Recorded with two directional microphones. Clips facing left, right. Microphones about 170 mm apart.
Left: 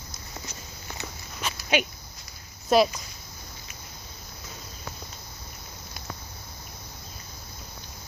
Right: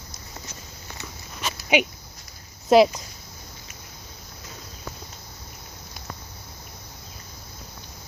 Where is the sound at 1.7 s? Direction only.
15° right (ahead or behind).